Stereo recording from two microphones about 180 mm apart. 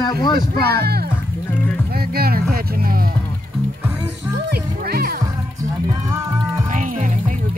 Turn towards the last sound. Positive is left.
turn(degrees=-45)  # may be behind; listen again after turning